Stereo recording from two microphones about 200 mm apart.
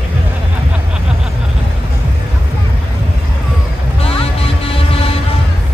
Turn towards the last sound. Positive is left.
turn(degrees=30)  # may be behind; listen again after turning